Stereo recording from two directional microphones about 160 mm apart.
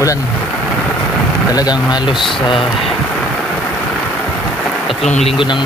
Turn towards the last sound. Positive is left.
turn(degrees=45)  # may be behind; listen again after turning